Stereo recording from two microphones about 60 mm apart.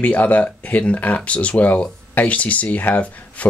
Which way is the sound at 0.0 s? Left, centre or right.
Left.